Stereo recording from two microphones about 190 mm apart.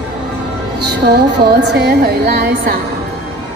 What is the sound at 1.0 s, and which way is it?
A woman's voice, 60° right (ahead or behind).